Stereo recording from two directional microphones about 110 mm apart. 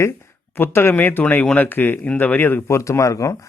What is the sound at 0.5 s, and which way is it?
Speech, 20° left (ahead or behind).